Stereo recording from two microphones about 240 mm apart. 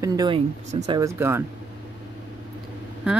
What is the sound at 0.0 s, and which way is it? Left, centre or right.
Speech, centre.